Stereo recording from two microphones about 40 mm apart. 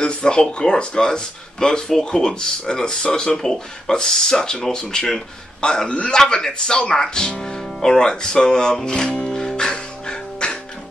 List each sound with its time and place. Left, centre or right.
0.0 s speech: left